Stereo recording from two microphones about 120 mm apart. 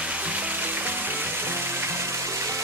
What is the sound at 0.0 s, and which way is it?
Music, 10° right (ahead or behind).